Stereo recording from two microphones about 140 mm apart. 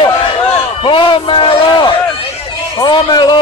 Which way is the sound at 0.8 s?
40° left (ahead or behind).